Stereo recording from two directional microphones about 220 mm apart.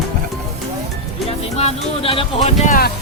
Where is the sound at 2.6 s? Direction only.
40° left (ahead or behind).